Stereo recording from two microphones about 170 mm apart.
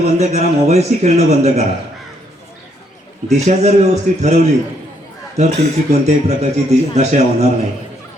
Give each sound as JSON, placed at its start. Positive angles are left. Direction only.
{"t": 0.0, "sound": "speech", "side_deg": -40}
{"t": 3.2, "sound": "speech", "side_deg": -40}
{"t": 5.4, "sound": "speech", "side_deg": -40}